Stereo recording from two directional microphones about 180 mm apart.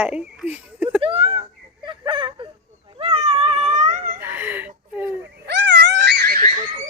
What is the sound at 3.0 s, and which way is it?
Cat, 35° right (ahead or behind).